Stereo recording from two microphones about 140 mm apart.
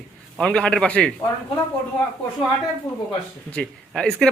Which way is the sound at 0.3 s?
5° left (ahead or behind).